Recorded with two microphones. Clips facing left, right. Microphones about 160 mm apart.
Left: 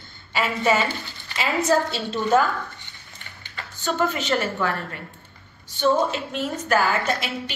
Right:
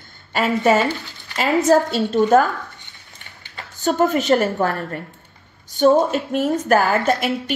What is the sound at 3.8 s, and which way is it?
A woman's voice, 45° right (ahead or behind).